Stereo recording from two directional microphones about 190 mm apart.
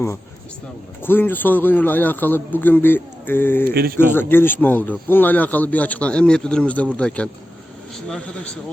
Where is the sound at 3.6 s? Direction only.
50° right (ahead or behind).